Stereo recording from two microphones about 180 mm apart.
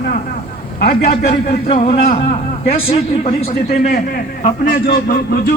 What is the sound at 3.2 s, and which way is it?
A man's voice, 35° left (ahead or behind).